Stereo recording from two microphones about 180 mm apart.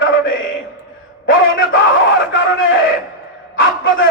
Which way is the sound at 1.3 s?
90° left.